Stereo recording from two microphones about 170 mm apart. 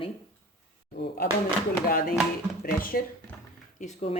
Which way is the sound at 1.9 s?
60° left (ahead or behind).